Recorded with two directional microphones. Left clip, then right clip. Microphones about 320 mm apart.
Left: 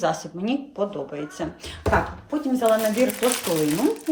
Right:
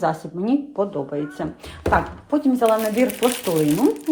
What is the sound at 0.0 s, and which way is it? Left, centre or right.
Speech, centre.